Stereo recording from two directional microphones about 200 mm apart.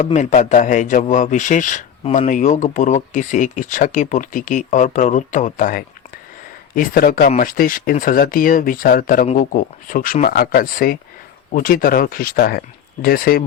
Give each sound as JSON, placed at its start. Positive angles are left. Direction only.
{"t": 0.0, "sound": "speech", "side_deg": 35}